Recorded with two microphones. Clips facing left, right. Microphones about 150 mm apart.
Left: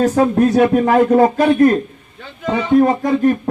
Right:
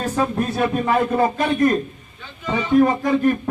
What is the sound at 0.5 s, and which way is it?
Speech, 70° left (ahead or behind).